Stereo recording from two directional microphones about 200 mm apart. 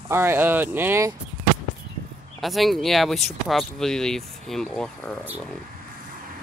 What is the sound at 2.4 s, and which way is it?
Speech, centre (ahead or behind).